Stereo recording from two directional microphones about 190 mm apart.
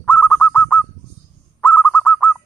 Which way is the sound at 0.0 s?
5° left (ahead or behind).